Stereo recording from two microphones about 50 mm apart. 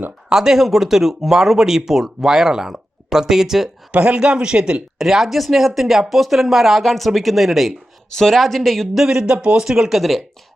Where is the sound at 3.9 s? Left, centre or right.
Right.